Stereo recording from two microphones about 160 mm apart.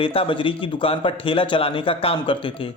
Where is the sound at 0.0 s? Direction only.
35° left (ahead or behind).